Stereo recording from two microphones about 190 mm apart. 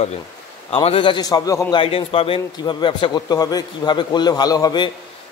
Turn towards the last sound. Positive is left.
turn(degrees=20)  # may be behind; listen again after turning